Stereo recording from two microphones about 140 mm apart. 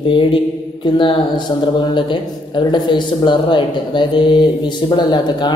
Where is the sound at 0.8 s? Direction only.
35° left (ahead or behind).